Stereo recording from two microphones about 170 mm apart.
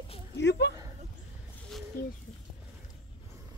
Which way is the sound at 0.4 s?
90° left.